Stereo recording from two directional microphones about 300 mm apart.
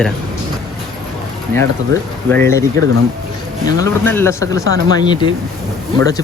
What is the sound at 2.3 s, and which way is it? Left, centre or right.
Speech, centre.